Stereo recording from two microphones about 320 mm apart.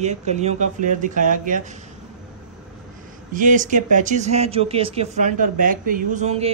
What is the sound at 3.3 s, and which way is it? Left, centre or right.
Speech, right.